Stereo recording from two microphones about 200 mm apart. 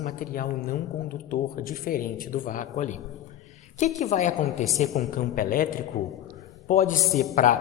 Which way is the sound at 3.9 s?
35° left (ahead or behind).